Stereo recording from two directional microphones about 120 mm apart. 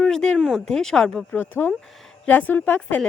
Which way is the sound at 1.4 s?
15° left (ahead or behind).